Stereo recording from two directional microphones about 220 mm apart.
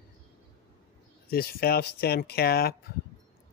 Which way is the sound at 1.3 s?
45° left (ahead or behind).